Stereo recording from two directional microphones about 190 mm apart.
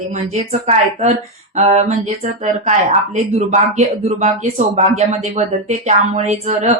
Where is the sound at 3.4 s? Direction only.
35° right (ahead or behind).